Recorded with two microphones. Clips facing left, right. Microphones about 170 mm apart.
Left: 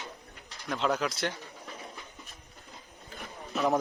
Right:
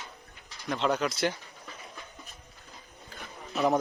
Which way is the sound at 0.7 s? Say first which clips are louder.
Right 1 dB; centre (ahead or behind).